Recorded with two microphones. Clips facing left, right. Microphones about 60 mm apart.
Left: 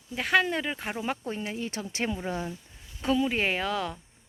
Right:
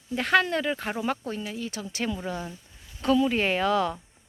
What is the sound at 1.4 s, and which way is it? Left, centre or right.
Speech, left.